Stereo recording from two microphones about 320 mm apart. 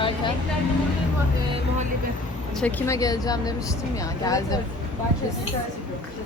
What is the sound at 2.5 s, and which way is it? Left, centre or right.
Speech, centre.